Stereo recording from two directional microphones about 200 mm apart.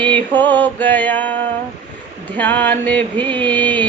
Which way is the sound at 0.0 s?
10° left (ahead or behind).